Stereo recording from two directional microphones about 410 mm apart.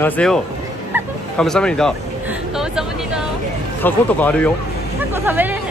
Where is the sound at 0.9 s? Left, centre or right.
Centre.